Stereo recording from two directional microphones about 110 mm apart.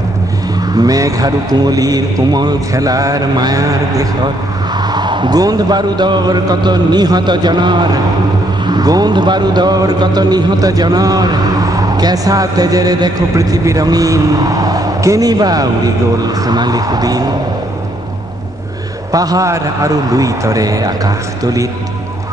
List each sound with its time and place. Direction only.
0.7 s speech: 35° right (ahead or behind)
4.9 s speech: 45° right (ahead or behind)
19.1 s speech: 35° right (ahead or behind)